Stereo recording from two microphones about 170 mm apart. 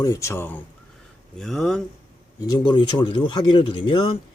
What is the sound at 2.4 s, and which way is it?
Speech, 25° left (ahead or behind).